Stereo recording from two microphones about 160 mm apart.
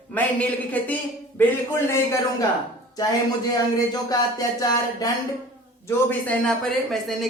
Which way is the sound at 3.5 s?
25° left (ahead or behind).